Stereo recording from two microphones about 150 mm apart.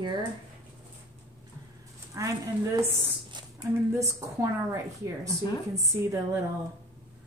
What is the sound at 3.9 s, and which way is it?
Speech, 20° right (ahead or behind).